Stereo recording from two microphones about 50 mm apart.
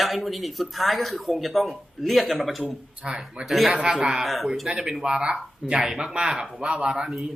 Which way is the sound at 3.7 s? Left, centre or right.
Centre.